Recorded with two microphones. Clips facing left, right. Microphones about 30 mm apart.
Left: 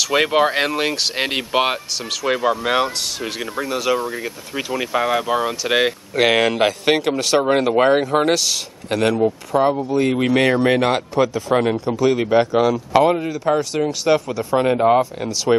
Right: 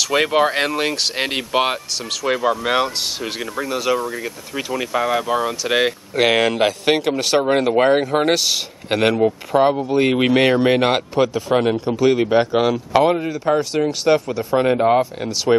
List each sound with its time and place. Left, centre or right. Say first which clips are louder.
0.1 s speech: even; centre; by 10.3 s right
10.4 s speech: right 1 dB; centre
12.7 s speech: even; centre